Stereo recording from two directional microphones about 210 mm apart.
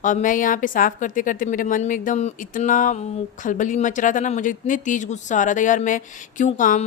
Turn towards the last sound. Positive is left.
turn(degrees=35)  # may be behind; listen again after turning